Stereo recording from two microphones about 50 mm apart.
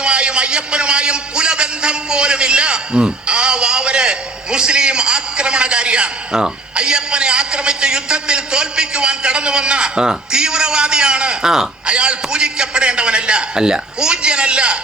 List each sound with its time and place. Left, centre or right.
0.0 s music: right
11.9 s a man's voice: centre